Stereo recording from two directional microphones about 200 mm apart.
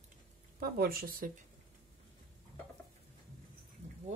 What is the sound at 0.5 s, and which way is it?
Speech, 50° right (ahead or behind).